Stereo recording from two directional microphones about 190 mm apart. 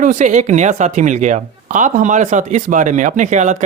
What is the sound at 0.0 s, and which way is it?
Speech, 40° right (ahead or behind).